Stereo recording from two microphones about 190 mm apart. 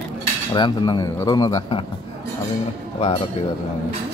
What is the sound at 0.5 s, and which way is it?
Speech, 20° left (ahead or behind).